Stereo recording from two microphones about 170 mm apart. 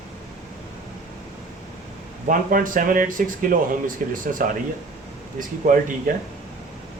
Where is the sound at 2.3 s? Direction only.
50° right (ahead or behind).